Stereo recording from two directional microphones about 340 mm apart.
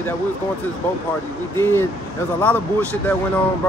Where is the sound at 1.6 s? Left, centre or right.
Centre.